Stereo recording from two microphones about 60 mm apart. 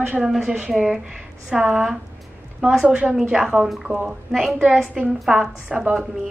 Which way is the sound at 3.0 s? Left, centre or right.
Centre.